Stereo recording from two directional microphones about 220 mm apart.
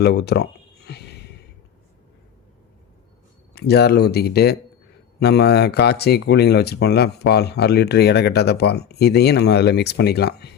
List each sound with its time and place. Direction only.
0.0 s speech: 50° left (ahead or behind)
0.9 s a sound: 50° left (ahead or behind)
3.5 s speech: 45° left (ahead or behind)